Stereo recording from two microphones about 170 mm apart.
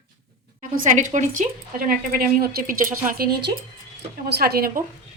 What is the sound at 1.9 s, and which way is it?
A woman's voice, 60° right (ahead or behind).